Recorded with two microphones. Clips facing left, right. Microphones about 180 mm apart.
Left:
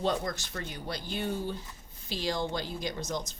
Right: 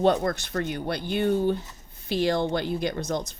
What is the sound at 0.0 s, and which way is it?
Speech, 65° right (ahead or behind).